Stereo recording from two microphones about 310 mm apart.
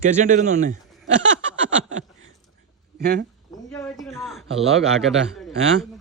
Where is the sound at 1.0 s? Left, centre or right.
Right.